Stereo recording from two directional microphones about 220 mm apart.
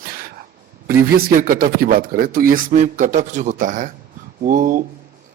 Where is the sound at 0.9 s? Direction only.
45° right (ahead or behind).